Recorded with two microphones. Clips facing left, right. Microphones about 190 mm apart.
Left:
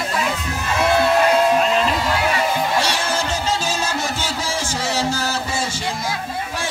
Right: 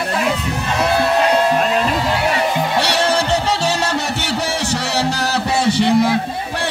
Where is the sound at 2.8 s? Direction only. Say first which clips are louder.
Right 5 dB; 65° right (ahead or behind).